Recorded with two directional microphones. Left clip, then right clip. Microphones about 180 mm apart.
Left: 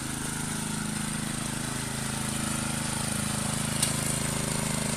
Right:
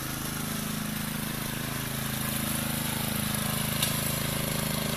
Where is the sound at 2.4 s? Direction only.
10° right (ahead or behind).